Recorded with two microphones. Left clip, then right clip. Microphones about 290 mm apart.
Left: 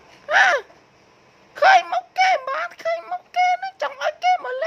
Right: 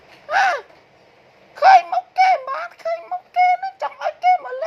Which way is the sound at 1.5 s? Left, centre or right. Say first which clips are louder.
Right 3 dB; left.